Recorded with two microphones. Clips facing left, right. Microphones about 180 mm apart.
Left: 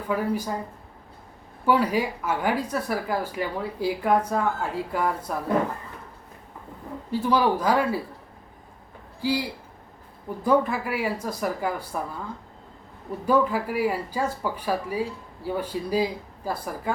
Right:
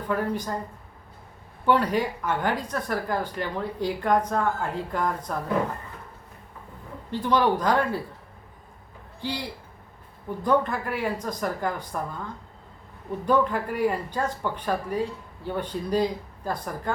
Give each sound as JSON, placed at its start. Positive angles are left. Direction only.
{"t": 0.1, "sound": "a woman's voice", "side_deg": 5}
{"t": 1.6, "sound": "a woman's voice", "side_deg": 5}
{"t": 7.1, "sound": "a woman's voice", "side_deg": 5}
{"t": 9.2, "sound": "a woman's voice", "side_deg": 10}